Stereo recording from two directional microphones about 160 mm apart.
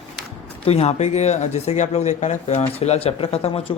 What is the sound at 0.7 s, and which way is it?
Speech, 40° left (ahead or behind).